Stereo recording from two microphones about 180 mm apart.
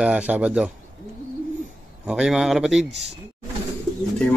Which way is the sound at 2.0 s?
5° right (ahead or behind).